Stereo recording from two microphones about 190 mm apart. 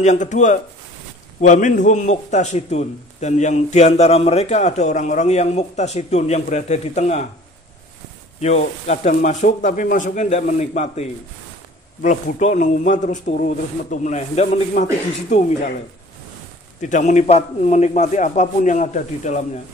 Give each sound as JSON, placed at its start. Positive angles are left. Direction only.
{"t": 0.0, "sound": "a man's voice", "side_deg": 40}
{"t": 8.4, "sound": "a man's voice", "side_deg": 35}
{"t": 16.8, "sound": "a man's voice", "side_deg": 40}